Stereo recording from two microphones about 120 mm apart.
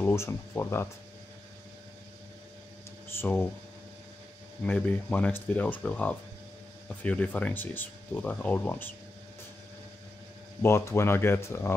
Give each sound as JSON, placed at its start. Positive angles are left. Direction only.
{"t": 0.0, "sound": "speech", "side_deg": 20}
{"t": 3.2, "sound": "speech", "side_deg": 20}
{"t": 4.6, "sound": "speech", "side_deg": 15}
{"t": 10.6, "sound": "speech", "side_deg": 25}